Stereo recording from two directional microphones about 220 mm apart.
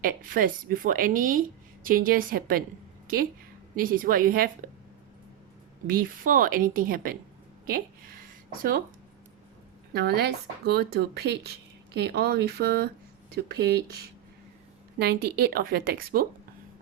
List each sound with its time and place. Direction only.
0.0 s speech: 40° right (ahead or behind)
3.8 s speech: 40° right (ahead or behind)
5.9 s speech: 40° right (ahead or behind)
9.9 s speech: 50° right (ahead or behind)
14.9 s speech: 45° right (ahead or behind)